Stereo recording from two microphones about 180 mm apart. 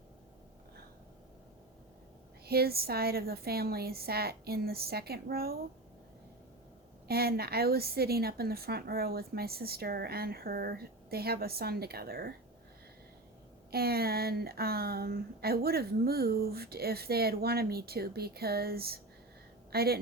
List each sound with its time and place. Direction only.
2.5 s speech: 60° right (ahead or behind)
7.1 s speech: 60° right (ahead or behind)
13.7 s speech: 60° right (ahead or behind)